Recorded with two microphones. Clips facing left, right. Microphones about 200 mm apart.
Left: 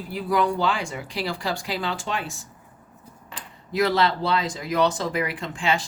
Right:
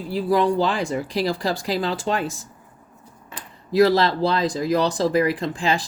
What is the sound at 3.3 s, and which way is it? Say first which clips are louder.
Speech: right 7 dB; 35° right (ahead or behind).